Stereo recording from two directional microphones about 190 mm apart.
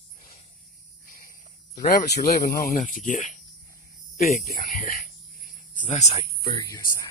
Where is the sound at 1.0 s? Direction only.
45° left (ahead or behind).